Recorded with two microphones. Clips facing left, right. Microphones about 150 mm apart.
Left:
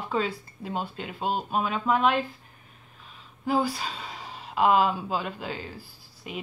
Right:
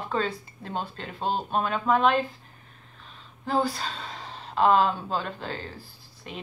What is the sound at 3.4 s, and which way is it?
A woman's voice, 10° left (ahead or behind).